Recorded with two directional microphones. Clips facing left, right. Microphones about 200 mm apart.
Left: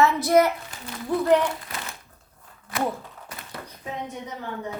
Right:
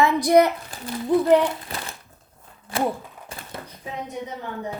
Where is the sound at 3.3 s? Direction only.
30° right (ahead or behind).